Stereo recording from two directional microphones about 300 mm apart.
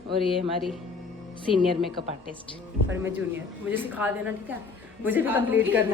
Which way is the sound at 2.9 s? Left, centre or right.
Centre.